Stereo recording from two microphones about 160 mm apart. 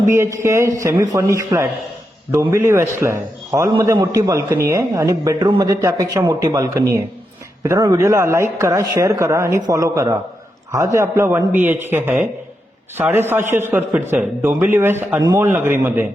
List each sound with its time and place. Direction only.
0.1 s a man's voice: 20° right (ahead or behind)